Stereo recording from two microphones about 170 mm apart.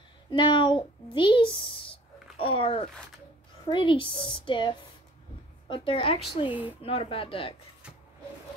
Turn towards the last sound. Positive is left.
turn(degrees=-5)  # may be behind; listen again after turning